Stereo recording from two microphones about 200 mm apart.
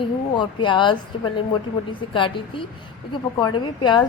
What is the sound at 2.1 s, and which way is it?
A woman's voice, 25° left (ahead or behind).